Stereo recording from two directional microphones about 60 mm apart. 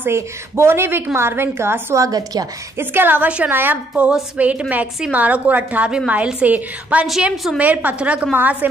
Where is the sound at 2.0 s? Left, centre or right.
Right.